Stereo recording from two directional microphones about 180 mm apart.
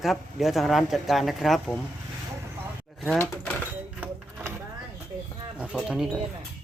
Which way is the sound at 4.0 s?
10° right (ahead or behind).